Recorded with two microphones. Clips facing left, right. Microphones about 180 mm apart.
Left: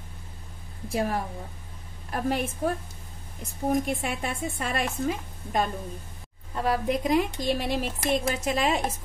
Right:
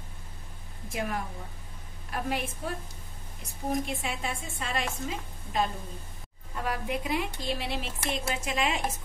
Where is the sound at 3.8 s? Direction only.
55° left (ahead or behind).